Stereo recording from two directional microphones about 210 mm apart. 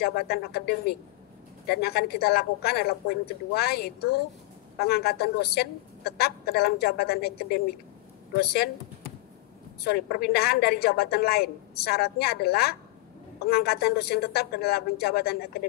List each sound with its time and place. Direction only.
0.0 s a woman's voice: 45° left (ahead or behind)
9.8 s a woman's voice: 45° left (ahead or behind)